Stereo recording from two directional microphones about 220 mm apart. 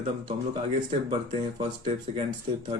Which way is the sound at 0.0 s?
30° right (ahead or behind).